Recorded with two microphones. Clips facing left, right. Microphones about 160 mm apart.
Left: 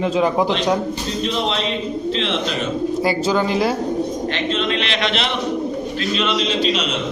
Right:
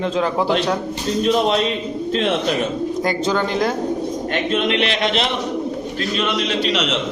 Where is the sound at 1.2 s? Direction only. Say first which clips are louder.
Right 6 dB; 50° right (ahead or behind).